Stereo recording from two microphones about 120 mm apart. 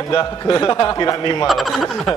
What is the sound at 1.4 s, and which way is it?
Speech, centre (ahead or behind).